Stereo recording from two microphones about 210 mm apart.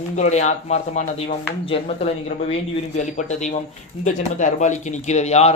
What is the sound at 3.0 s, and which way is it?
Speech, 35° left (ahead or behind).